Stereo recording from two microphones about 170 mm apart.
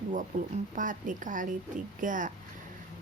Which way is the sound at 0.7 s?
50° right (ahead or behind).